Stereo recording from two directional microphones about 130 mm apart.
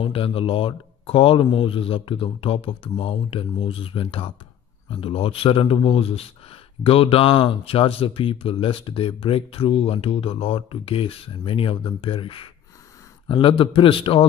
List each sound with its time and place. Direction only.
0.0 s speech: 45° left (ahead or behind)